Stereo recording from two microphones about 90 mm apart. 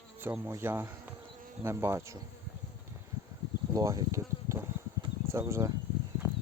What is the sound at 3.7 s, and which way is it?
Insect, 40° right (ahead or behind).